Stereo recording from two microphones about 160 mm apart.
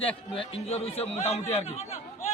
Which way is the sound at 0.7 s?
40° left (ahead or behind).